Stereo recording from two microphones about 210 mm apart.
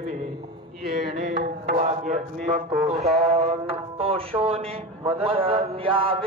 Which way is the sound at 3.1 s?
30° right (ahead or behind).